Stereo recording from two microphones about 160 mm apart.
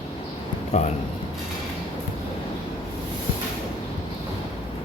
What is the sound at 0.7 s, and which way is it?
Speech, 45° left (ahead or behind).